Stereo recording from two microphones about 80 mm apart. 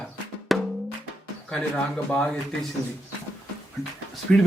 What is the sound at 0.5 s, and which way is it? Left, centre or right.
Music, centre.